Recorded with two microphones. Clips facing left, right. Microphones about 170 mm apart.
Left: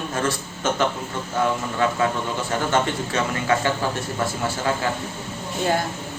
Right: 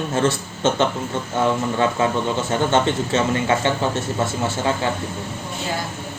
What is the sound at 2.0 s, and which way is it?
A man's voice, 25° right (ahead or behind).